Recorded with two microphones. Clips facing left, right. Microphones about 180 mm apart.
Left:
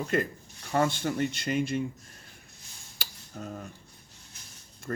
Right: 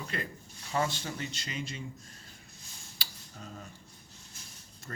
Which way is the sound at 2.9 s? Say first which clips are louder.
Left 7 dB; 50° left (ahead or behind).